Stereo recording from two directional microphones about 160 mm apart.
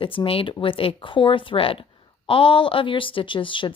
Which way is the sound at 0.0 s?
35° left (ahead or behind).